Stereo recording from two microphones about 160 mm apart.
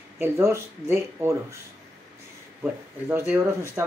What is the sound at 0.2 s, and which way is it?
Speech, 15° right (ahead or behind).